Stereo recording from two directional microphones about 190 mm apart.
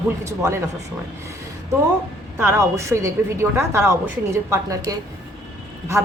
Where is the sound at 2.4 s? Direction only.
15° right (ahead or behind).